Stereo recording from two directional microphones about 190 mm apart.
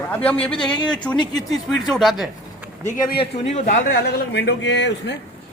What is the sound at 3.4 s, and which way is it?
Speech, 40° left (ahead or behind).